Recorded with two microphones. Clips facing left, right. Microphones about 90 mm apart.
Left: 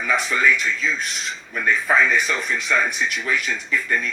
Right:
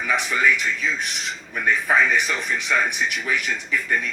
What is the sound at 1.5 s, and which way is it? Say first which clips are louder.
A man's voice: left 1 dB; 15° right (ahead or behind).